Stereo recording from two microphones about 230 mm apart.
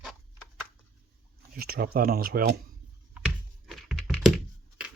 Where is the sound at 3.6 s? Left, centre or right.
Centre.